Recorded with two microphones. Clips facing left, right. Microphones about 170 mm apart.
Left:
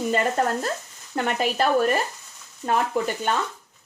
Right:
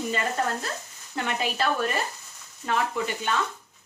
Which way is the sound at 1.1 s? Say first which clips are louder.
Left 5 dB; 45° left (ahead or behind).